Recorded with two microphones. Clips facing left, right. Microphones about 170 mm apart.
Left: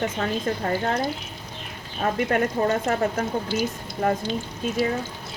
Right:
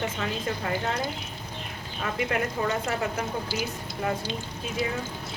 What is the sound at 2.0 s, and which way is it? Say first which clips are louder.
Speech: left 6 dB; 40° left (ahead or behind).